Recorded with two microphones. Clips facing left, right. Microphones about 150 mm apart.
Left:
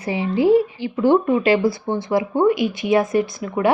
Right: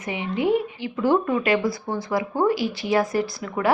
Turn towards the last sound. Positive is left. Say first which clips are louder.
# left 4 dB
turn(degrees=20)  # may be behind; listen again after turning